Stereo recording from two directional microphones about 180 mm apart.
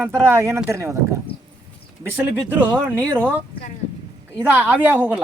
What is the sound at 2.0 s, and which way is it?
A woman's voice, 10° right (ahead or behind).